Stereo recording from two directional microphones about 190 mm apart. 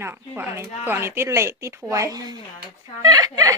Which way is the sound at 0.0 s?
15° right (ahead or behind).